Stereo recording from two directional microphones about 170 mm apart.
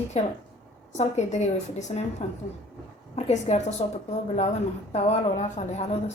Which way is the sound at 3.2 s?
40° left (ahead or behind).